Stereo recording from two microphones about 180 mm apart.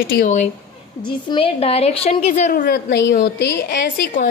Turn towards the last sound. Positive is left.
turn(degrees=70)  # may be behind; listen again after turning